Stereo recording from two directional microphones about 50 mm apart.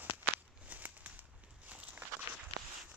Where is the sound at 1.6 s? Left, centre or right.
Right.